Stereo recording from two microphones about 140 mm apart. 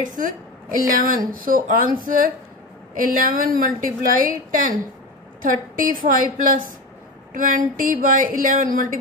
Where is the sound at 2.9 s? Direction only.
80° right.